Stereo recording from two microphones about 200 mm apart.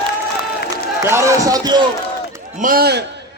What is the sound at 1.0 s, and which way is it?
Speech, 15° right (ahead or behind).